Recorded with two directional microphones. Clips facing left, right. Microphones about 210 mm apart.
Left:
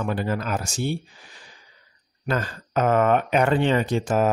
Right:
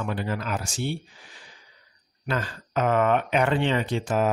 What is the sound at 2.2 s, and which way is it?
Speech, 45° left (ahead or behind).